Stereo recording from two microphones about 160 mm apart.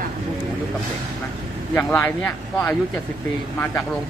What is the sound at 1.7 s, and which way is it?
Speech, 10° left (ahead or behind).